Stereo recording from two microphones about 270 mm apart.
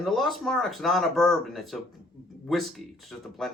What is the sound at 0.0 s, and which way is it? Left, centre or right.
Speech, centre.